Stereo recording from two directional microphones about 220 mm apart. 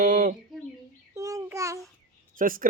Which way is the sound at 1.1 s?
15° right (ahead or behind).